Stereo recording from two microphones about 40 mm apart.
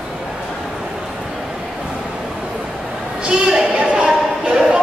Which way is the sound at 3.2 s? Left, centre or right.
Right.